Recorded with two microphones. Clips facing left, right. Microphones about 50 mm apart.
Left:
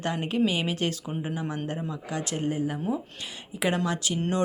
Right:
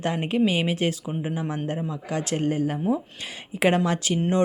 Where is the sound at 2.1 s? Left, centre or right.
Right.